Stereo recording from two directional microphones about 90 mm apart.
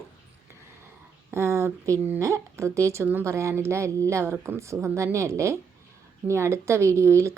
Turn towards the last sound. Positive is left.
turn(degrees=-30)  # may be behind; listen again after turning